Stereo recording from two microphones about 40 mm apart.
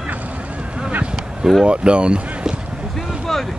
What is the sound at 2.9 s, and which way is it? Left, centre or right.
Vehicle, centre.